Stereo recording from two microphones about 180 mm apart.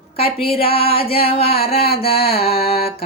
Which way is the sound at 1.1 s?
35° left (ahead or behind).